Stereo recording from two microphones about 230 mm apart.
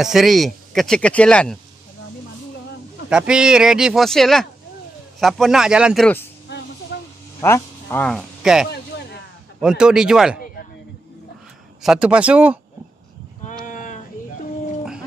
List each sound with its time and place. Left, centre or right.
0.0 s speech: centre
3.1 s speech: centre
7.4 s speech: centre
11.8 s speech: centre
13.5 s a sound: left